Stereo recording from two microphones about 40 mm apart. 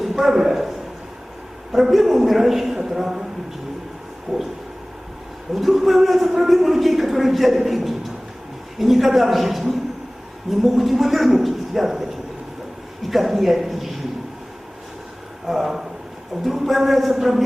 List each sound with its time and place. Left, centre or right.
0.0 s a sound: centre
1.7 s a man's voice: centre
4.3 s vehicle: right
5.5 s a man's voice: centre
13.1 s speech: centre
15.4 s a man's voice: centre